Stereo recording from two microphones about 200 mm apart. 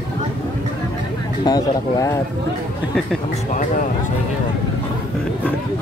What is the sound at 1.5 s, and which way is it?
Speech, 20° left (ahead or behind).